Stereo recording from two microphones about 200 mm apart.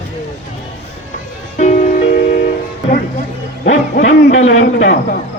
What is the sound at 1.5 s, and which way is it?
Music, 35° left (ahead or behind).